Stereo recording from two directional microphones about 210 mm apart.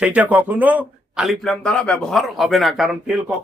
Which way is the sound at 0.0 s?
5° right (ahead or behind).